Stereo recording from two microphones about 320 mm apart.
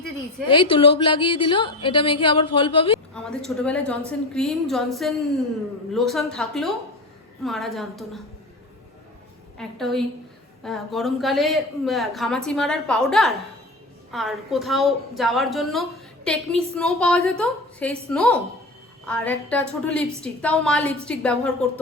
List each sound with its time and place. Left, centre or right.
0.4 s a woman's voice: centre
3.2 s a woman's voice: centre
9.6 s a woman's voice: centre